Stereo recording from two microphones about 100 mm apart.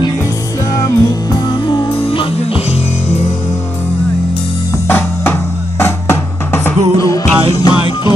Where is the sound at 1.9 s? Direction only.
65° left (ahead or behind).